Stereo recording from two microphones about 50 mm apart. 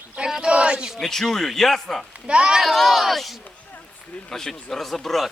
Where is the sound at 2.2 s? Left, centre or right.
Centre.